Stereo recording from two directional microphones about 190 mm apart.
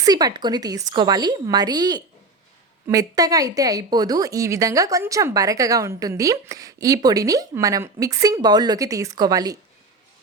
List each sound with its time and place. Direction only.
0.0 s a woman's voice: 20° right (ahead or behind)